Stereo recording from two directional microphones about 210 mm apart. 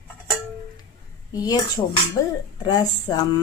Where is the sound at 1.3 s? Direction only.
20° left (ahead or behind).